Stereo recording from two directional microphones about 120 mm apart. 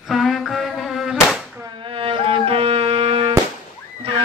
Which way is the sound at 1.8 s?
45° right (ahead or behind).